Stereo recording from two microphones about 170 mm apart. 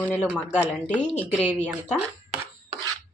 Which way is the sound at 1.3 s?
10° right (ahead or behind).